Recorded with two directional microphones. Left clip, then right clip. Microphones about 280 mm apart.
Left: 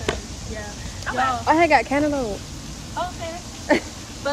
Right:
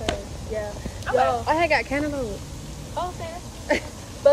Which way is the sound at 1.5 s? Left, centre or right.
Centre.